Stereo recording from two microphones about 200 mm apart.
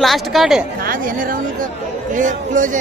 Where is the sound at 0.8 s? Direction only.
45° right (ahead or behind).